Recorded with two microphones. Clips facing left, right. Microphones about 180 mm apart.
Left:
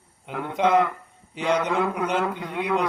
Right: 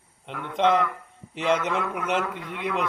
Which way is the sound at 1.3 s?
Centre (ahead or behind).